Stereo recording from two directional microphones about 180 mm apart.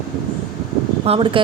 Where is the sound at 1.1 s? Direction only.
30° right (ahead or behind).